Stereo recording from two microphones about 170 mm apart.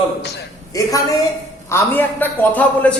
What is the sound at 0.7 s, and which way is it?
A woman's voice, 20° left (ahead or behind).